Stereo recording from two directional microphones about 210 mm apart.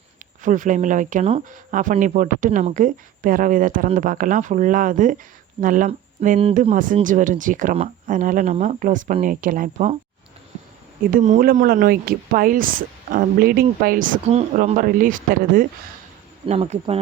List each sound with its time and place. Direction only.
0.4 s speech: 40° right (ahead or behind)
11.1 s speech: 40° right (ahead or behind)